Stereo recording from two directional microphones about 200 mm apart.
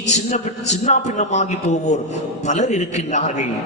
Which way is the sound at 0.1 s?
35° left (ahead or behind).